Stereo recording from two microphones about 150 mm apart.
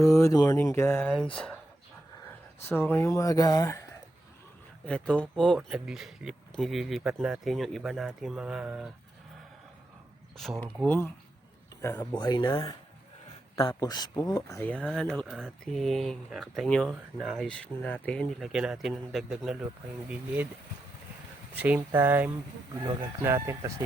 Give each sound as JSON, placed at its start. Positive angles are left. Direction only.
{"t": 0.0, "sound": "speech", "side_deg": 20}
{"t": 2.6, "sound": "speech", "side_deg": 15}
{"t": 4.9, "sound": "speech", "side_deg": 5}
{"t": 10.8, "sound": "speech", "side_deg": 10}
{"t": 12.1, "sound": "speech", "side_deg": 30}
{"t": 15.0, "sound": "speech", "side_deg": 5}
{"t": 21.5, "sound": "speech", "side_deg": -10}